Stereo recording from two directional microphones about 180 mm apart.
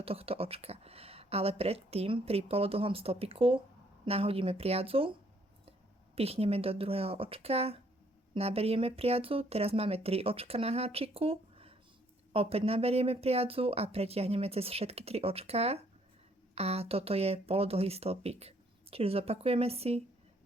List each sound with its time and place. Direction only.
0.0 s speech: 30° right (ahead or behind)
6.1 s speech: 35° right (ahead or behind)